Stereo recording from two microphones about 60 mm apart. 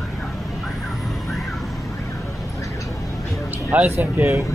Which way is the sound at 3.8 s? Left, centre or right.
Right.